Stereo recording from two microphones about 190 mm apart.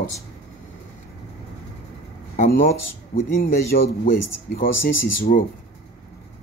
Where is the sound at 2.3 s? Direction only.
40° left (ahead or behind).